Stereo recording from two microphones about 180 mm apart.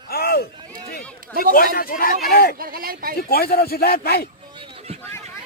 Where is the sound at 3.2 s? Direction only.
60° left (ahead or behind).